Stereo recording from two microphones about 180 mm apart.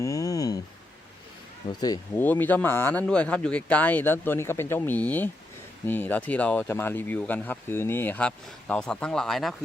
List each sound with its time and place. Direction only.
0.0 s a sound: 20° left (ahead or behind)
1.8 s speech: 20° left (ahead or behind)
2.2 s speech: 10° left (ahead or behind)